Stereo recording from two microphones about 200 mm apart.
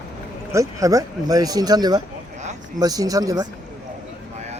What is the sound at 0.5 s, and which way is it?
Speech, 15° right (ahead or behind).